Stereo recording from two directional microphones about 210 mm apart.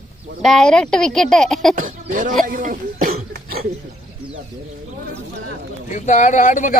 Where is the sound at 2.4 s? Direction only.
40° right (ahead or behind).